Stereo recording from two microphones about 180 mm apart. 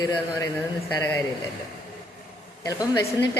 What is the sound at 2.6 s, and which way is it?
Speech, 20° left (ahead or behind).